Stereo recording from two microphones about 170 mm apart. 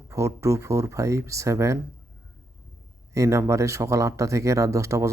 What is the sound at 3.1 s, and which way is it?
Speech, 15° right (ahead or behind).